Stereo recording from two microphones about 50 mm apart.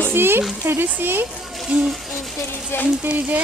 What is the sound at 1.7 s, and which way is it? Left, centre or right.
Speech, right.